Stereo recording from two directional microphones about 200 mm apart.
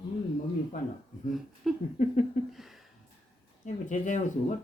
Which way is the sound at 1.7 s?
Centre (ahead or behind).